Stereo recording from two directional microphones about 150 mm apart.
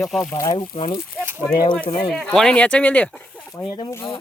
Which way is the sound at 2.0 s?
Centre (ahead or behind).